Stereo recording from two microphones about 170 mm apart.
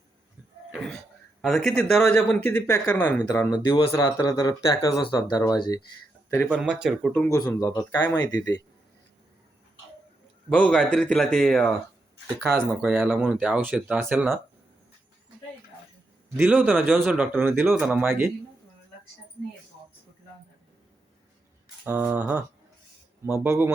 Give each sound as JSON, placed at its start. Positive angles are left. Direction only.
{"t": 0.7, "sound": "speech", "side_deg": 5}
{"t": 6.4, "sound": "speech", "side_deg": -5}
{"t": 7.1, "sound": "speech", "side_deg": 10}
{"t": 7.3, "sound": "speech", "side_deg": 20}
{"t": 10.5, "sound": "speech", "side_deg": 5}
{"t": 12.5, "sound": "speech", "side_deg": -10}
{"t": 16.4, "sound": "speech", "side_deg": -10}
{"t": 21.8, "sound": "speech", "side_deg": -10}